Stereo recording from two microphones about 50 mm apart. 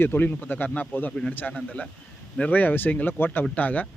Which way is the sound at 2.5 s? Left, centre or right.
Left.